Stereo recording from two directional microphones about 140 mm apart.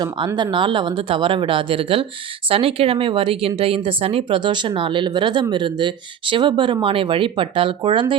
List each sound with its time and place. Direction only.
0.5 s a woman's voice: 35° right (ahead or behind)